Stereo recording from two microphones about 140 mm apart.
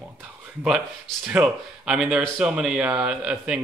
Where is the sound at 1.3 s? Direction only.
5° right (ahead or behind).